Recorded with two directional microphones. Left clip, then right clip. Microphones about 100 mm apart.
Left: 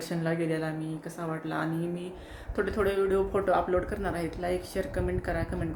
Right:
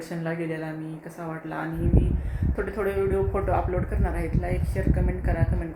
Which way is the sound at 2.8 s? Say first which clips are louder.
Right 1 dB; 20° left (ahead or behind).